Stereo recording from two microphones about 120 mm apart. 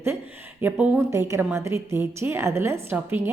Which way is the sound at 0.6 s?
20° right (ahead or behind).